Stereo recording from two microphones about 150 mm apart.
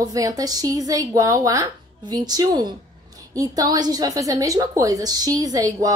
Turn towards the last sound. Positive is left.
turn(degrees=-25)  # may be behind; listen again after turning